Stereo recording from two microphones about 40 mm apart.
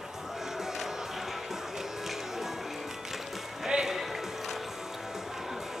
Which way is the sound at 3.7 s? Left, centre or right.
Right.